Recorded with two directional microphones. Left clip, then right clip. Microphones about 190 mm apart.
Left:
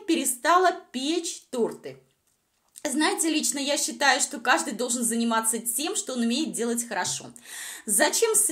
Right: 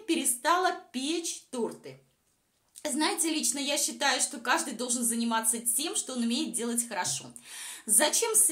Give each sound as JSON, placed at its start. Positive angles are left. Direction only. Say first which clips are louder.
{"t": 0.0, "sound": "a woman's voice", "louder": "left 4 dB", "side_deg": 20}